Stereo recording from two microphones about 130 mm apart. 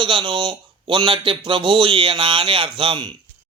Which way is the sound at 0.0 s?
40° right (ahead or behind).